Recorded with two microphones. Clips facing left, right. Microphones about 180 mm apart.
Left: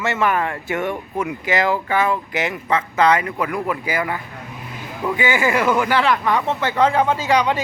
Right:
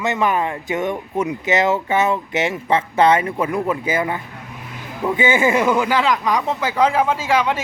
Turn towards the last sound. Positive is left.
turn(degrees=-5)  # may be behind; listen again after turning